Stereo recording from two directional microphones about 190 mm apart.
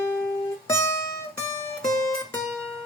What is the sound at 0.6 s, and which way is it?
Music, 15° left (ahead or behind).